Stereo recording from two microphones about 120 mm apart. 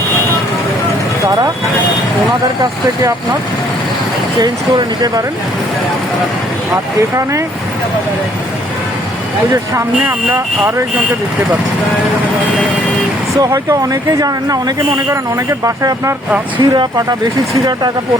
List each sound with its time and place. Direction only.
4.4 s speech: 35° right (ahead or behind)
10.0 s speech: 20° right (ahead or behind)
13.4 s speech: 30° right (ahead or behind)